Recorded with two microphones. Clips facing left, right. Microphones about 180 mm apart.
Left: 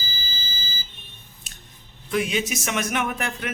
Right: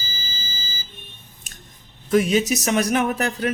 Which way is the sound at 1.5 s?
45° right (ahead or behind).